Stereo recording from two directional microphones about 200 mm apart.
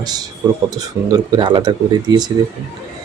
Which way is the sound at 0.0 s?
20° right (ahead or behind).